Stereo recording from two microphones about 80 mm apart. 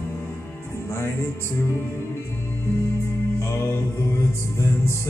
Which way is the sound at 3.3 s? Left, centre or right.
Left.